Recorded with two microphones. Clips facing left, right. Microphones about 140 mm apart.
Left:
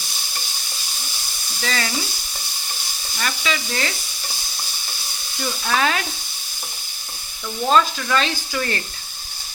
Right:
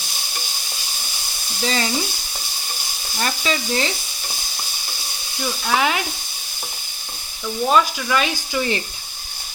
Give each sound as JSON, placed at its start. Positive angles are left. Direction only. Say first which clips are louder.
{"t": 1.6, "sound": "frying", "louder": "right 3 dB", "side_deg": -25}
{"t": 3.2, "sound": "speech", "louder": "right 2 dB", "side_deg": -35}
{"t": 3.7, "sound": "frying", "louder": "right 4 dB", "side_deg": -20}
{"t": 5.4, "sound": "frying", "louder": "right 1 dB", "side_deg": -10}
{"t": 7.4, "sound": "frying", "louder": "even", "side_deg": -10}